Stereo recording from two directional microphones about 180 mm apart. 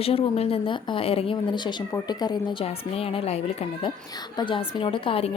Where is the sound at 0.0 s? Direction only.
30° left (ahead or behind).